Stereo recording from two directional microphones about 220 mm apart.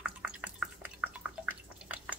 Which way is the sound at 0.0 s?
5° right (ahead or behind).